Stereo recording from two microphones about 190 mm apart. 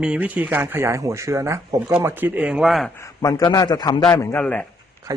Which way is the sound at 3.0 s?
20° left (ahead or behind).